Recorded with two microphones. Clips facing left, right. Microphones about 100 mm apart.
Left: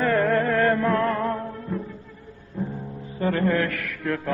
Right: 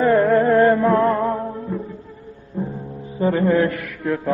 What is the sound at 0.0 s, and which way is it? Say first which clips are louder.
Music: right 6 dB; 10° right (ahead or behind).